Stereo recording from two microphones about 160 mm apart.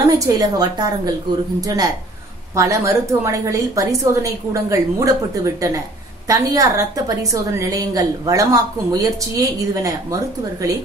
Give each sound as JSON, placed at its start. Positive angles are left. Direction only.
{"t": 0.2, "sound": "a woman's voice", "side_deg": -25}
{"t": 2.5, "sound": "a woman's voice", "side_deg": -20}